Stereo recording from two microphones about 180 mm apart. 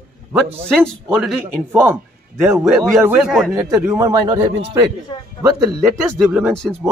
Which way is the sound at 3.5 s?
15° right (ahead or behind).